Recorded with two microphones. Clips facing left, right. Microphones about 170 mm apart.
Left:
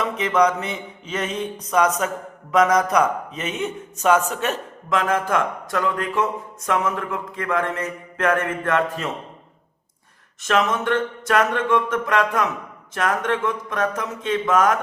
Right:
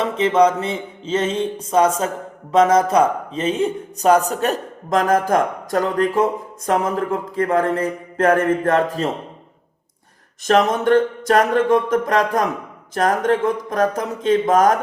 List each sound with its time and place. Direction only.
0.0 s mantra: 30° right (ahead or behind)
10.4 s mantra: 40° right (ahead or behind)